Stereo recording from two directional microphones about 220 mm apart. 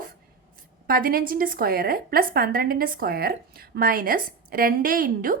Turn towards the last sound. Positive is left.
turn(degrees=-40)  # may be behind; listen again after turning